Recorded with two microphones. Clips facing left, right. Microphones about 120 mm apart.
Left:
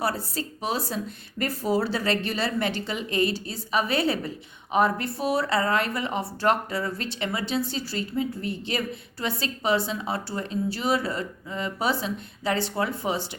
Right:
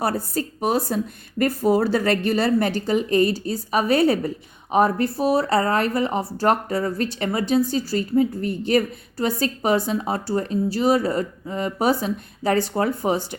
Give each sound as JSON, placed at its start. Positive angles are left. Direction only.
{"t": 0.0, "sound": "speech", "side_deg": -50}